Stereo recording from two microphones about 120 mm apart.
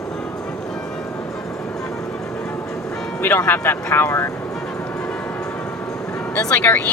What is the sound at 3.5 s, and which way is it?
Speech, 20° left (ahead or behind).